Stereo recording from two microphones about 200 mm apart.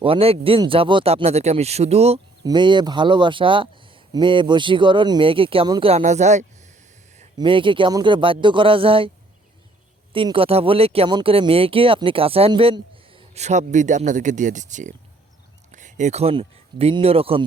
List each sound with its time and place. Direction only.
0.0 s speech: 30° right (ahead or behind)
2.4 s speech: 20° right (ahead or behind)
7.3 s speech: 25° right (ahead or behind)
10.1 s speech: 25° right (ahead or behind)